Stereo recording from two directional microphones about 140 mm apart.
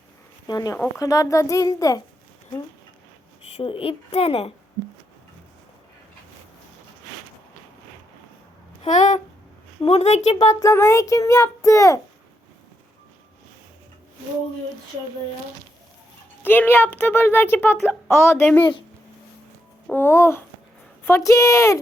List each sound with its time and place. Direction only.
0.4 s a child's voice: 30° left (ahead or behind)
3.4 s a woman's voice: 45° left (ahead or behind)
8.8 s a sound: 60° left (ahead or behind)
9.8 s a woman's voice: 50° left (ahead or behind)
10.6 s a child's voice: 20° left (ahead or behind)
16.4 s speech: 15° left (ahead or behind)
19.9 s a child's voice: 15° left (ahead or behind)